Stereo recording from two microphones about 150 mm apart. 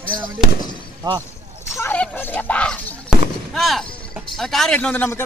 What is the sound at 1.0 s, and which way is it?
Speech, 25° right (ahead or behind).